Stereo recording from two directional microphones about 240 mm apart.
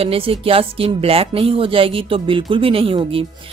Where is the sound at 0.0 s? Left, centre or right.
Right.